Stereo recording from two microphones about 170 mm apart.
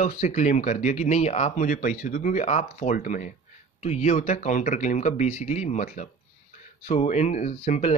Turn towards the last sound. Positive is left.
turn(degrees=40)  # may be behind; listen again after turning